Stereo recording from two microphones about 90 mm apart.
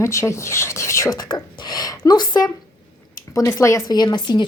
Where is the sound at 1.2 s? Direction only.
50° left (ahead or behind).